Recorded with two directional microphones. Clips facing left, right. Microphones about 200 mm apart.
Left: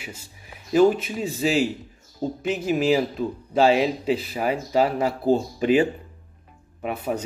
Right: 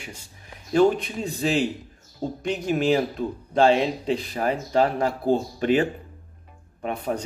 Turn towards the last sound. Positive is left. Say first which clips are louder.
# left 1 dB
turn(degrees=5)  # may be behind; listen again after turning